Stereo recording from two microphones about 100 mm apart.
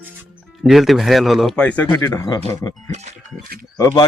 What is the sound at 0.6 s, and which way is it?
Speech, centre (ahead or behind).